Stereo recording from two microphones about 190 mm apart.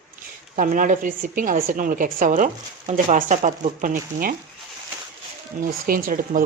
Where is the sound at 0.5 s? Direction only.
45° right (ahead or behind).